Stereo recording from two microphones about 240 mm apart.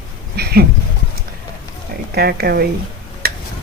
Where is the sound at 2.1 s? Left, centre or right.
Right.